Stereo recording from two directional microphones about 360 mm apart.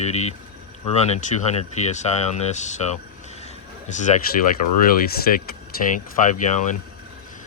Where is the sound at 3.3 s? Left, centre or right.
Centre.